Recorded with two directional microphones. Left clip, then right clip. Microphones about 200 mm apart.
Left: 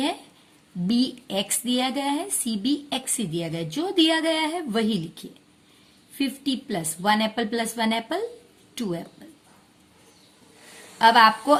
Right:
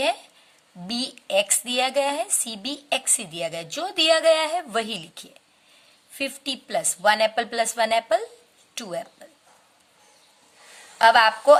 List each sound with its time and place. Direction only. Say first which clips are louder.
0.9 s a woman's voice: left 1 dB; 30° right (ahead or behind)
10.9 s speech: even; 30° right (ahead or behind)